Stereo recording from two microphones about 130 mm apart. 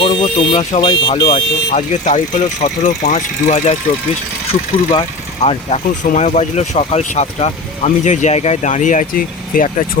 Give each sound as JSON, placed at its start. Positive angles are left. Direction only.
{"t": 0.0, "sound": "car alarm", "side_deg": 40}
{"t": 0.3, "sound": "speech", "side_deg": 60}
{"t": 0.8, "sound": "speech", "side_deg": 40}
{"t": 5.4, "sound": "speech", "side_deg": 55}